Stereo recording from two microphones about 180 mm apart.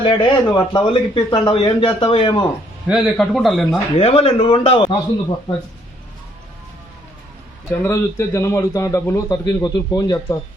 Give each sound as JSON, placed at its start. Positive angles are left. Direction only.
{"t": 0.0, "sound": "a man's voice", "side_deg": 25}
{"t": 2.8, "sound": "speech", "side_deg": 0}
{"t": 3.9, "sound": "a man's voice", "side_deg": 35}
{"t": 7.7, "sound": "a man's voice", "side_deg": 15}